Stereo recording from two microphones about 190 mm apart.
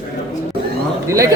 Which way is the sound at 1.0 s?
15° right (ahead or behind).